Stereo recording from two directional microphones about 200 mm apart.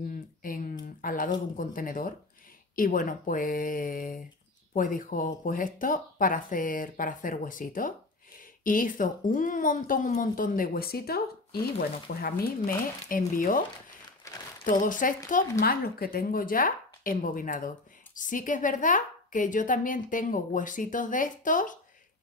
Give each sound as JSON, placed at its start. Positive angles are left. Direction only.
{"t": 0.4, "sound": "a sound", "side_deg": 45}
{"t": 1.0, "sound": "speech", "side_deg": 45}
{"t": 14.2, "sound": "crumpling", "side_deg": 15}
{"t": 14.6, "sound": "speech", "side_deg": 40}